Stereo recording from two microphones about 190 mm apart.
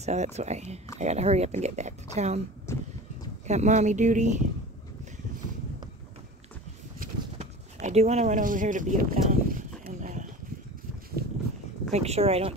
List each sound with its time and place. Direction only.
0.0 s speech: 35° right (ahead or behind)
2.7 s vehicle: 15° left (ahead or behind)
3.4 s speech: 40° right (ahead or behind)
7.0 s a sound: 35° right (ahead or behind)
11.9 s speech: 35° right (ahead or behind)